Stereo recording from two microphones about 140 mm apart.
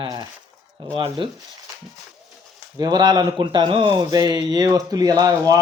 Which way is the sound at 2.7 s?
30° right (ahead or behind).